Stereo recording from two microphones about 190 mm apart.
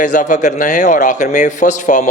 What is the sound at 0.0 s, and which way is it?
A man's voice, 40° left (ahead or behind).